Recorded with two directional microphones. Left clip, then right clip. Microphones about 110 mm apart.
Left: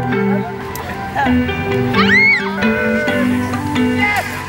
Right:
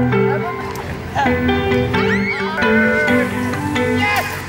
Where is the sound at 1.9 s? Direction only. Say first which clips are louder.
Left 6 dB; 20° left (ahead or behind).